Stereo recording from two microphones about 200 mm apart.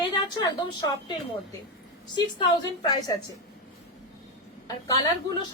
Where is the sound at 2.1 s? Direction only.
20° left (ahead or behind).